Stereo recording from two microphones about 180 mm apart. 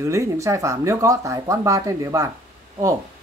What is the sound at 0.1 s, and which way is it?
Speech, 15° right (ahead or behind).